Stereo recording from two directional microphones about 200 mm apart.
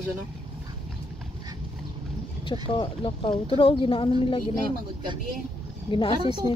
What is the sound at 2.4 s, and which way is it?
Speech, 25° left (ahead or behind).